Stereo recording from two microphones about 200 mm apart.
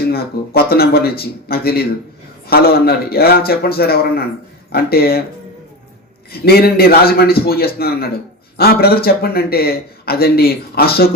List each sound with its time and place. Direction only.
0.1 s a man's voice: 50° left (ahead or behind)
6.4 s a man's voice: 50° left (ahead or behind)